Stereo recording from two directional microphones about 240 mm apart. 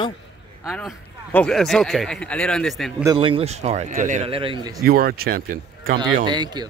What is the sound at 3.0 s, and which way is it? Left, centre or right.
A man's voice, centre.